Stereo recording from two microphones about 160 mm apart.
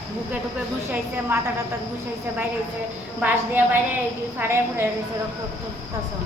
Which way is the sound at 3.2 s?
10° right (ahead or behind).